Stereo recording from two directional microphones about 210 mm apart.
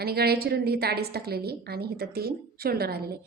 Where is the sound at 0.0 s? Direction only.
50° right (ahead or behind).